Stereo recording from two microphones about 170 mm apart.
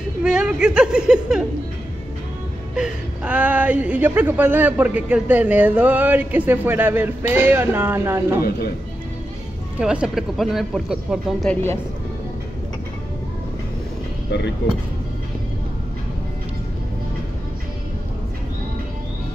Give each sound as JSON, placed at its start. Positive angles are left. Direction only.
{"t": 0.2, "sound": "speech", "side_deg": -5}
{"t": 2.7, "sound": "a woman's voice", "side_deg": -5}
{"t": 8.5, "sound": "a man's voice", "side_deg": 65}
{"t": 9.8, "sound": "speech", "side_deg": -5}